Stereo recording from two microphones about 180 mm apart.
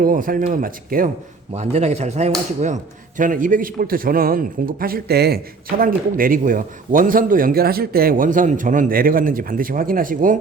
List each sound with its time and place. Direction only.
0.0 s a man's voice: 50° right (ahead or behind)
1.5 s a man's voice: 35° right (ahead or behind)